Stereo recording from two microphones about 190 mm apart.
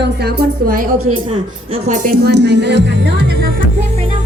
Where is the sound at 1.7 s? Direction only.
40° right (ahead or behind); by 3.4 s 60° right (ahead or behind).